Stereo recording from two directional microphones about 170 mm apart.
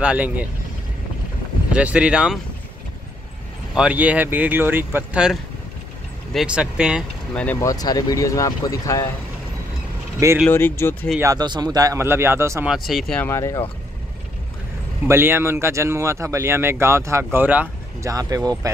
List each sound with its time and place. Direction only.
0.0 s speech: 10° right (ahead or behind)
1.7 s speech: 5° right (ahead or behind)
3.7 s speech: 5° right (ahead or behind)
7.6 s speech: 20° left (ahead or behind)
10.5 s speech: 15° left (ahead or behind)
11.1 s speech: 20° right (ahead or behind)
12.6 s speech: centre (ahead or behind)
13.2 s speech: 15° left (ahead or behind)
15.0 s speech: 15° right (ahead or behind)
18.1 s speech: 20° right (ahead or behind)